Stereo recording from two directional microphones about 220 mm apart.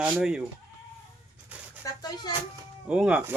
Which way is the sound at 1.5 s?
5° right (ahead or behind).